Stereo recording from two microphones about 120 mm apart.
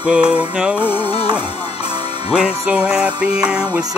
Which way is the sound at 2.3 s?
10° right (ahead or behind).